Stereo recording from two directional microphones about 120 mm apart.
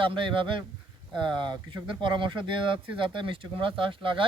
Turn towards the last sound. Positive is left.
turn(degrees=-45)  # may be behind; listen again after turning